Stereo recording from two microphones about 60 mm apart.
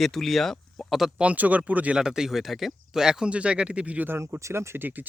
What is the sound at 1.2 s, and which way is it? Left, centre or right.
Speech, right.